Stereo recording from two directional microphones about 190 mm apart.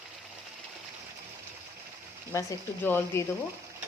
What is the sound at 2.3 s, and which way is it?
Speech, 15° left (ahead or behind).